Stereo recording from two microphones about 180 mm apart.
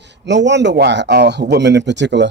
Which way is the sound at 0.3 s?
80° right.